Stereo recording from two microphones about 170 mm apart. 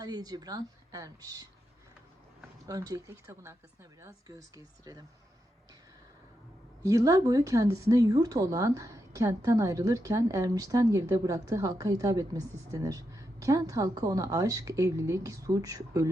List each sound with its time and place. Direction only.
0.0 s speech: 25° right (ahead or behind)
2.6 s speech: 20° right (ahead or behind)
6.8 s speech: 20° right (ahead or behind)